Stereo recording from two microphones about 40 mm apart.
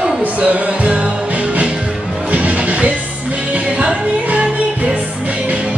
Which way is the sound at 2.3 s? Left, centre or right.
Right.